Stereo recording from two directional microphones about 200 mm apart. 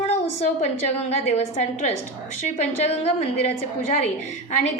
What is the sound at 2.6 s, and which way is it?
A woman's voice, 30° left (ahead or behind).